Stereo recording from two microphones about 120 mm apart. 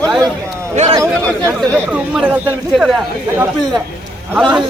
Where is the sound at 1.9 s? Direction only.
10° right (ahead or behind).